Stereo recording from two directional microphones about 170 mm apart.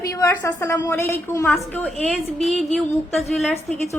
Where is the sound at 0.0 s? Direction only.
20° left (ahead or behind).